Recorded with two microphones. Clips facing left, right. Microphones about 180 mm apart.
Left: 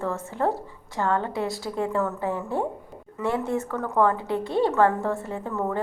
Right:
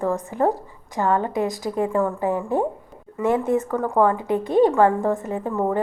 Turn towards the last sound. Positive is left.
turn(degrees=-15)  # may be behind; listen again after turning